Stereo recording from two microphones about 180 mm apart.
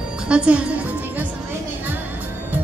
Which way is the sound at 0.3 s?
5° right (ahead or behind).